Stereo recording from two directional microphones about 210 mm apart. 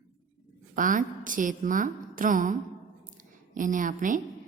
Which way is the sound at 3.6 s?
40° right (ahead or behind).